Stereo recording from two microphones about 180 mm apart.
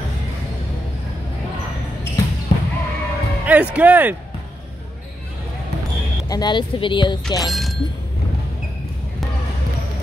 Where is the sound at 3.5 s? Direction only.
10° right (ahead or behind).